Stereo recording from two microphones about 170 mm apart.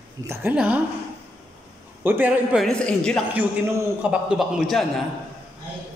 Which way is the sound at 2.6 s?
5° left (ahead or behind).